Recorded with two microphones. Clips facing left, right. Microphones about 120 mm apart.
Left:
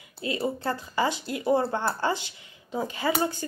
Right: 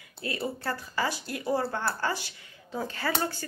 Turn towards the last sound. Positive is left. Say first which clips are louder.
# left 4 dB
turn(degrees=15)  # may be behind; listen again after turning